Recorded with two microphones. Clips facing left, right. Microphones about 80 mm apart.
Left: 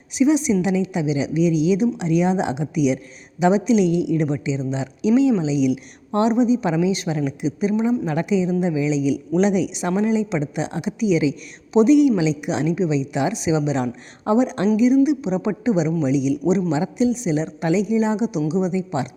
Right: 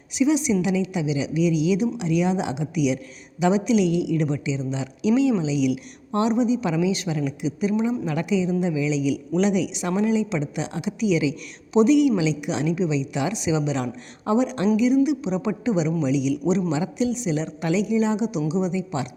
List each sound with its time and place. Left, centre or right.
0.1 s a woman's voice: left